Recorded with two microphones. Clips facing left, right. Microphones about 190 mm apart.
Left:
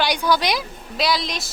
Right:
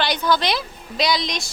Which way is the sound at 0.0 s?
10° left (ahead or behind).